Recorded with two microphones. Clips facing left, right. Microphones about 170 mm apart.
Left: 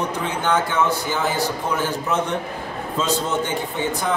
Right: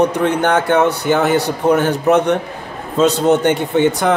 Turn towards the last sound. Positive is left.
turn(degrees=-70)  # may be behind; listen again after turning